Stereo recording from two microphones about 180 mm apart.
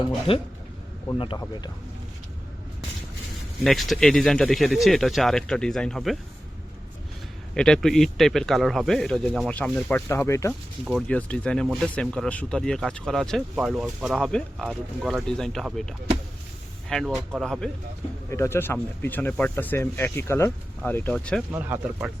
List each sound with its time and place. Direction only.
0.3 s speech: 30° left (ahead or behind)
3.6 s speech: centre (ahead or behind)
7.5 s speech: 5° left (ahead or behind)
10.1 s speech: 15° left (ahead or behind)
18.3 s speech: 15° left (ahead or behind)
21.5 s speech: 10° right (ahead or behind)